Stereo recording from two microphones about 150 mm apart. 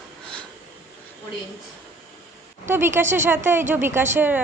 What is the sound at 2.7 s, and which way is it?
Speech, 15° right (ahead or behind).